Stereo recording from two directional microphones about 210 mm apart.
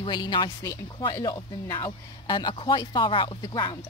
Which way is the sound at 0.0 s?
20° left (ahead or behind).